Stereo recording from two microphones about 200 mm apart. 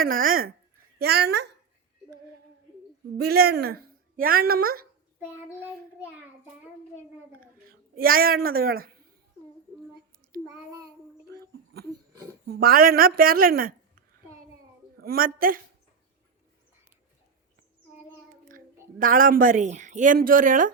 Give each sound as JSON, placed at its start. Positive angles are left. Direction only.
{"t": 0.0, "sound": "a woman's voice", "side_deg": -45}
{"t": 3.2, "sound": "a woman's voice", "side_deg": -50}
{"t": 7.7, "sound": "a woman's voice", "side_deg": -50}
{"t": 12.5, "sound": "a woman's voice", "side_deg": -45}
{"t": 15.0, "sound": "a woman's voice", "side_deg": -45}
{"t": 18.4, "sound": "a woman's voice", "side_deg": -45}